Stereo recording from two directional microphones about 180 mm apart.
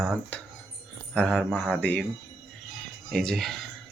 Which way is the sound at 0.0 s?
Centre (ahead or behind).